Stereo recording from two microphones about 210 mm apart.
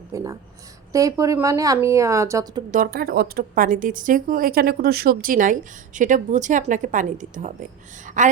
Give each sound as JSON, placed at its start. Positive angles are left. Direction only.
{"t": 0.1, "sound": "a woman's voice", "side_deg": -15}
{"t": 2.7, "sound": "speech", "side_deg": -45}